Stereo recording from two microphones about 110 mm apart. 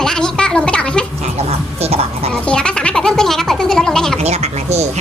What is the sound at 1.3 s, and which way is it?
Music, 70° right (ahead or behind).